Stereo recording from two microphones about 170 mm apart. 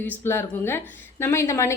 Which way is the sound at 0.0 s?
15° left (ahead or behind).